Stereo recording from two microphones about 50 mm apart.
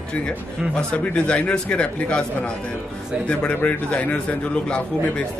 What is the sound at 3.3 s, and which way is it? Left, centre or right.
Speech, left.